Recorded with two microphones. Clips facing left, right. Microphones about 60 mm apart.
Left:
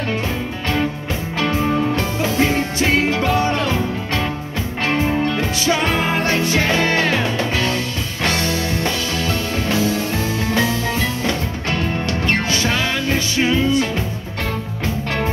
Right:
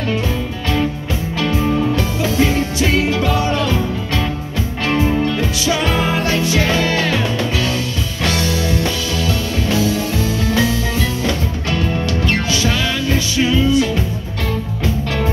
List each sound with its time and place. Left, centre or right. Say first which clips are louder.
1.4 s music: right 1 dB; left